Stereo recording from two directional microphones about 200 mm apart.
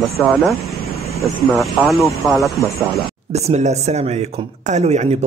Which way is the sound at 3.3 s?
35° right (ahead or behind).